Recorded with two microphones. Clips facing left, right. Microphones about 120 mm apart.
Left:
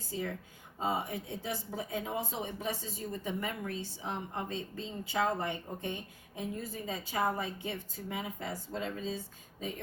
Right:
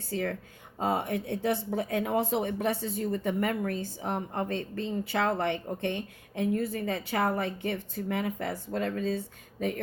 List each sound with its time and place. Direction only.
0.1 s speech: 70° right (ahead or behind)